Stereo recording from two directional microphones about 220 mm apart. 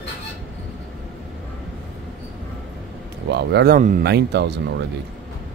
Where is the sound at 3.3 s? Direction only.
50° right (ahead or behind).